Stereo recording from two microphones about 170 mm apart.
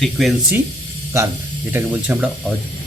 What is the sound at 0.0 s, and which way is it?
Speech, centre (ahead or behind).